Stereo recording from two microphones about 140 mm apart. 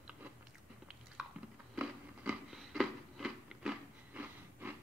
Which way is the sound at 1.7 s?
10° right (ahead or behind).